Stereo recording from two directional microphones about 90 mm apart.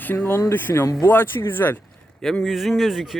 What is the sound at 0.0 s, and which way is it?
Speech, 20° left (ahead or behind).